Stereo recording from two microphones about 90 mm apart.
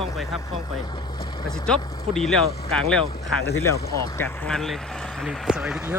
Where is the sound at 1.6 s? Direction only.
5° left (ahead or behind).